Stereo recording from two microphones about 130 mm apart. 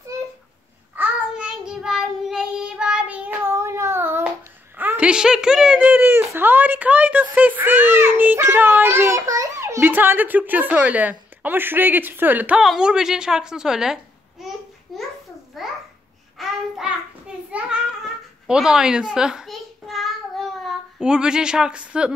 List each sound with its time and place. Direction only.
0.9 s child singing: 5° right (ahead or behind)
4.7 s speech: 15° right (ahead or behind)
14.9 s a sound: centre (ahead or behind)
15.6 s babbling: centre (ahead or behind)
16.3 s child singing: 5° right (ahead or behind)
17.5 s a sound: 10° right (ahead or behind)